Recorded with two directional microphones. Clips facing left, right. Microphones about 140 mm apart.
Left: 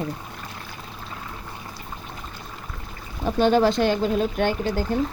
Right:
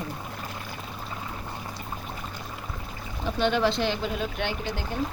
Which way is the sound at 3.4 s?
40° left (ahead or behind).